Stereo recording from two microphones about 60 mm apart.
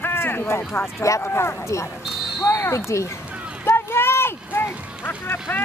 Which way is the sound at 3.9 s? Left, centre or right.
Left.